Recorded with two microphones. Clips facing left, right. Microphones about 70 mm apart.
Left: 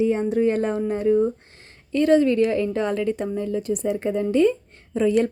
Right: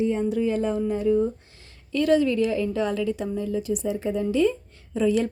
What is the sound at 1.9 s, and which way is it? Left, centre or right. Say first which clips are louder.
A woman's voice: left 3 dB; left.